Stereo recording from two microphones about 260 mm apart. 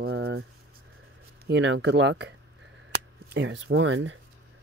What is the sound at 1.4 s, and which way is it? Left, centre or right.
Speech, right.